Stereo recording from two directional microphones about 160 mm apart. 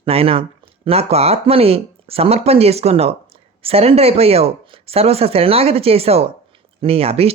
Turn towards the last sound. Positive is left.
turn(degrees=-40)  # may be behind; listen again after turning